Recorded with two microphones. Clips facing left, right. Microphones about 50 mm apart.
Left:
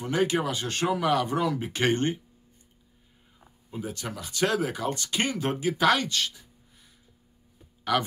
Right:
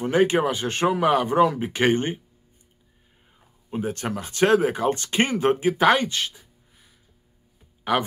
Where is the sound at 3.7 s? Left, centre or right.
Right.